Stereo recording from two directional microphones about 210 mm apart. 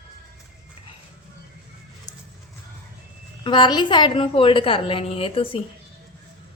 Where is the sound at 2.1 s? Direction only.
20° left (ahead or behind).